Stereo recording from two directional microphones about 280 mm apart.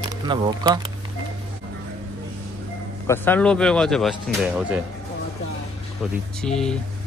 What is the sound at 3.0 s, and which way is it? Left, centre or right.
Speech, centre.